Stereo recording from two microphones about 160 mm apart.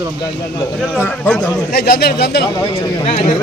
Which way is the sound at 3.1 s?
40° left (ahead or behind).